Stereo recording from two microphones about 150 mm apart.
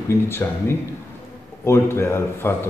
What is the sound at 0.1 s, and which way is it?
A man's voice, 15° left (ahead or behind).